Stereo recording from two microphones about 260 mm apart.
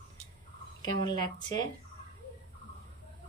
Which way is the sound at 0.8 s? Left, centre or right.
Centre.